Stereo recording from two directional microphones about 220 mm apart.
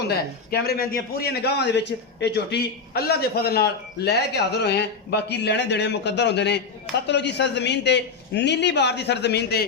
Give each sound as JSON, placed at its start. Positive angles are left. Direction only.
{"t": 0.1, "sound": "a man's voice", "side_deg": 45}